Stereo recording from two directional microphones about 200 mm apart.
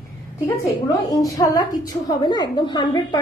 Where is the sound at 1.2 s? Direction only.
20° left (ahead or behind).